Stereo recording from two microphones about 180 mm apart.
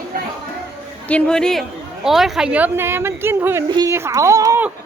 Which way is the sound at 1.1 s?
5° left (ahead or behind).